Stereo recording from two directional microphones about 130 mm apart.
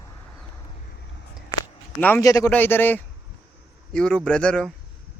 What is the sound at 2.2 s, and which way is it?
Speech, 25° left (ahead or behind).